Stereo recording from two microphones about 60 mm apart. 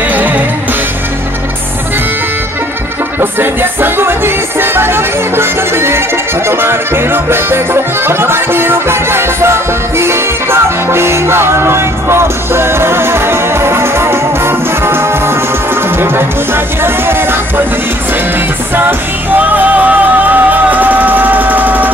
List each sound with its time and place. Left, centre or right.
0.1 s music: right
3.2 s music: right
18.8 s music: right